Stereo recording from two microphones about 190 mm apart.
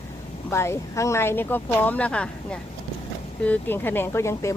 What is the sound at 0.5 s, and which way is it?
Speech, 15° left (ahead or behind).